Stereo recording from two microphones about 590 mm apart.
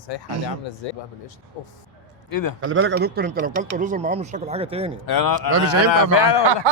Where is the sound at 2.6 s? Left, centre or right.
Centre.